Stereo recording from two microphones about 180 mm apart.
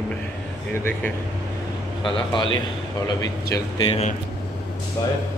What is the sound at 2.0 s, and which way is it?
A man's voice, 30° left (ahead or behind).